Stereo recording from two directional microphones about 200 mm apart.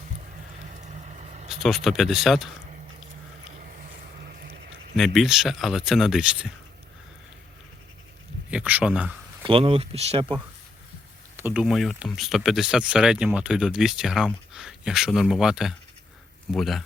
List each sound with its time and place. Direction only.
0.7 s vehicle: 35° right (ahead or behind)
1.5 s speech: centre (ahead or behind)
4.3 s a sound: 50° right (ahead or behind)
4.9 s speech: centre (ahead or behind)
8.4 s speech: 5° right (ahead or behind)
9.4 s speech: 25° right (ahead or behind)
11.3 s speech: 10° right (ahead or behind)